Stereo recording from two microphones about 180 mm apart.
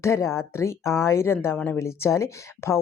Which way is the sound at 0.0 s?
15° left (ahead or behind).